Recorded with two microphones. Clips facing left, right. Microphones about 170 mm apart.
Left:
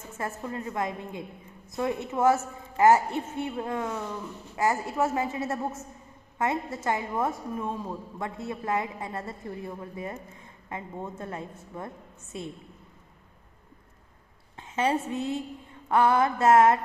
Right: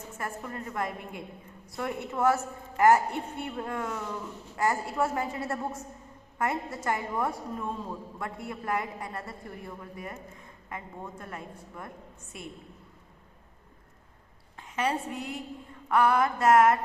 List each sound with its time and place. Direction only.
0.2 s a man's voice: 20° left (ahead or behind)
14.8 s a man's voice: 25° left (ahead or behind)